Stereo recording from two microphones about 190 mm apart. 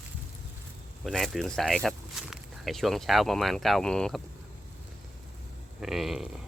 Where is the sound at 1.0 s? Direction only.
Centre (ahead or behind).